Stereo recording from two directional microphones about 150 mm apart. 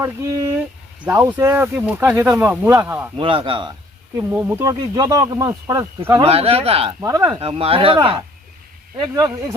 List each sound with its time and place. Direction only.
0.0 s speech: 20° right (ahead or behind)
3.2 s speech: 35° right (ahead or behind)
4.2 s speech: 10° right (ahead or behind)
6.2 s speech: 40° right (ahead or behind)
7.0 s speech: 25° right (ahead or behind)
7.3 s speech: 40° right (ahead or behind)
9.0 s speech: 25° right (ahead or behind)